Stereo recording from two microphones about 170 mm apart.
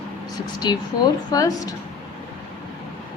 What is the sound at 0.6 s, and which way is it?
A woman's voice, 25° left (ahead or behind).